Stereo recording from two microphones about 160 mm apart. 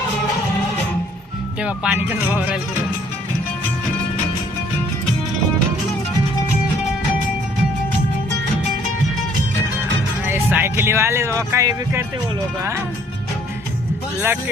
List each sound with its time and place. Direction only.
1.6 s speech: 10° right (ahead or behind)
10.2 s music: 15° right (ahead or behind)
11.3 s speech: 20° right (ahead or behind)
14.2 s speech: 15° right (ahead or behind)